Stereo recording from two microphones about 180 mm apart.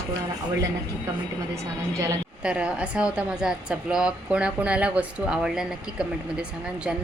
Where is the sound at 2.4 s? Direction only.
5° right (ahead or behind).